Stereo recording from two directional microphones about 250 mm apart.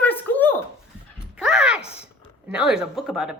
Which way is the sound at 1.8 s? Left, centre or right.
Left.